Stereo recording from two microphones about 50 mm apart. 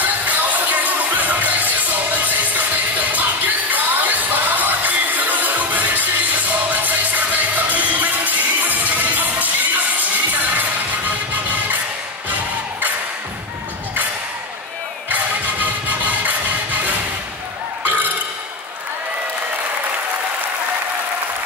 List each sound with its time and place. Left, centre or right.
0.0 s music: right
15.0 s music: right
17.8 s burping: right